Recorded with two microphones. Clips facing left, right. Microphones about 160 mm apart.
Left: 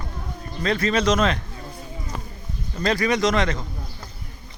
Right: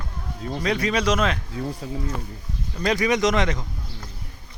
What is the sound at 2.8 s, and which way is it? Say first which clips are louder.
Speech: even; 15° right (ahead or behind).